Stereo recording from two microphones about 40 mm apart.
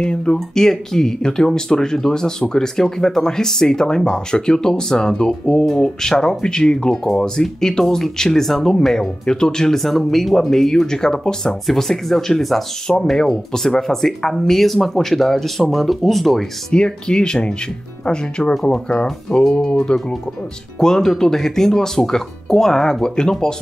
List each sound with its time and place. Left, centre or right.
0.0 s speech: left
0.6 s speech: centre
9.2 s speech: left
9.8 s speech: centre
11.6 s speech: centre
12.9 s speech: centre
16.7 s speech: left
20.8 s speech: centre